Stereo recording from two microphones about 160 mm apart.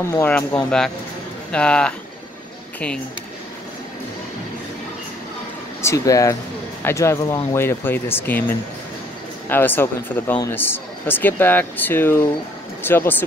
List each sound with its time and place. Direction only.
0.0 s a man's voice: 15° left (ahead or behind)
5.8 s speech: 20° left (ahead or behind)